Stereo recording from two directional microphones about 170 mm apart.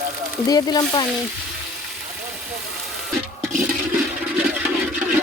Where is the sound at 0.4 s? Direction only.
25° left (ahead or behind).